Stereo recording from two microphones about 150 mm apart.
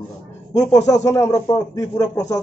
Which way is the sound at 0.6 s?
20° left (ahead or behind).